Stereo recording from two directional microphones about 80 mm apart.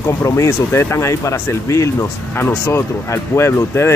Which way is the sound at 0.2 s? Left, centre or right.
Left.